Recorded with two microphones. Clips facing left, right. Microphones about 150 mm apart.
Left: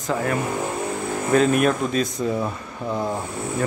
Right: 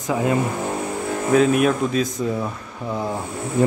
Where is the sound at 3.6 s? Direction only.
20° right (ahead or behind).